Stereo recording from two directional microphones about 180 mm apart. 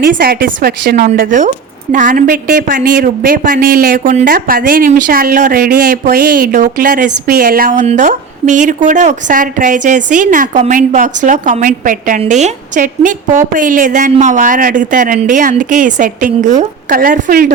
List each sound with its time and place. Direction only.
0.0 s speech: 55° right (ahead or behind)